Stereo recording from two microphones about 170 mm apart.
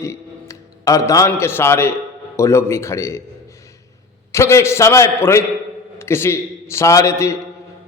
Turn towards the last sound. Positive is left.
turn(degrees=15)  # may be behind; listen again after turning